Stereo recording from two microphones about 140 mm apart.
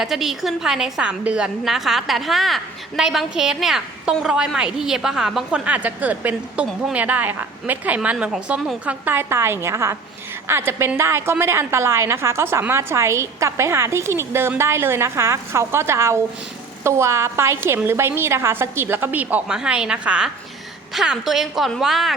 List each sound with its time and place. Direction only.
0.0 s a woman's voice: centre (ahead or behind)